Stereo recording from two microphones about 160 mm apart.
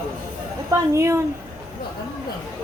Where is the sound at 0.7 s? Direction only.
20° right (ahead or behind).